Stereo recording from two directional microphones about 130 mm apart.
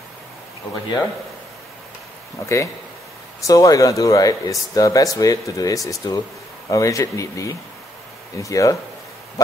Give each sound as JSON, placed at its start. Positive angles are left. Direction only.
{"t": 2.4, "sound": "speech", "side_deg": 25}